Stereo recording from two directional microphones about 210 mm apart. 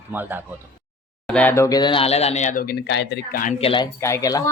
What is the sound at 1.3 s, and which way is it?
Speech, 5° left (ahead or behind).